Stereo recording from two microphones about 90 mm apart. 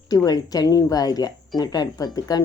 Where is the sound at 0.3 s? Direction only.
45° left (ahead or behind).